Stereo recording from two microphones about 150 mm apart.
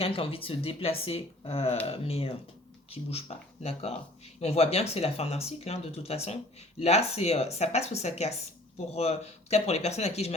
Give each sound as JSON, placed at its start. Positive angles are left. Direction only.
{"t": 0.0, "sound": "speech", "side_deg": 40}